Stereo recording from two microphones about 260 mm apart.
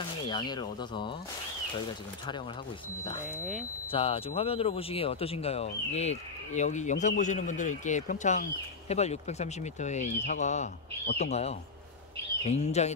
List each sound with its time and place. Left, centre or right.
0.3 s speech: centre
3.9 s speech: left